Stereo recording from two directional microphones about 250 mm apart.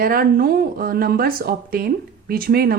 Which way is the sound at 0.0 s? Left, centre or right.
Right.